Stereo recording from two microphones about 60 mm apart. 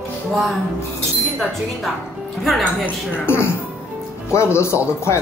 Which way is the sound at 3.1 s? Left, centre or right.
Left.